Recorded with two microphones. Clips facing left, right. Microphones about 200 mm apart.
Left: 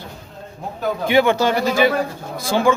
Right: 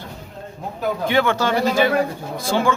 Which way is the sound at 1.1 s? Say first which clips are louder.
Left 4 dB; 15° left (ahead or behind).